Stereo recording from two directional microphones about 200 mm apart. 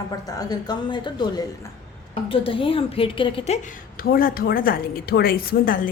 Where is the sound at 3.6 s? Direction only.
45° left (ahead or behind).